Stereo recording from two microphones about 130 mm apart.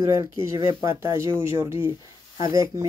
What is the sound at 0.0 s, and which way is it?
Speech, 20° right (ahead or behind).